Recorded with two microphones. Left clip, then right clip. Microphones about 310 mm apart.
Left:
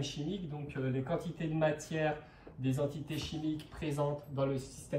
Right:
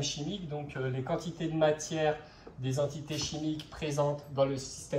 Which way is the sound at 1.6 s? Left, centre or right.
Centre.